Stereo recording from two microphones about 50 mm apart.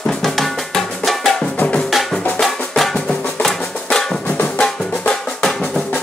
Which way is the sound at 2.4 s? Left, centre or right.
Centre.